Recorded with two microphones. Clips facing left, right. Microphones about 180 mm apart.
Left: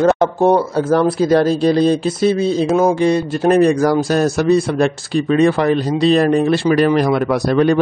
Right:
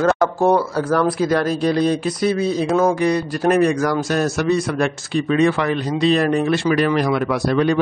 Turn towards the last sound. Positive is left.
turn(degrees=40)  # may be behind; listen again after turning